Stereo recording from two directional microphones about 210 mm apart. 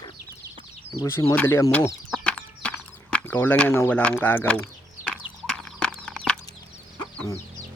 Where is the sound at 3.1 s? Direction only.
10° left (ahead or behind).